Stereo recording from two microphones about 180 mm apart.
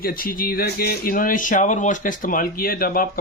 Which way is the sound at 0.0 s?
55° left (ahead or behind).